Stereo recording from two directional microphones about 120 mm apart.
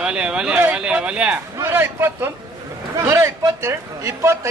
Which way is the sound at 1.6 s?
20° right (ahead or behind).